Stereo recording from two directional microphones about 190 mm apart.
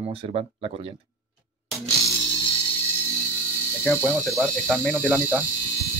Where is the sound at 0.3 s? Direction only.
30° right (ahead or behind).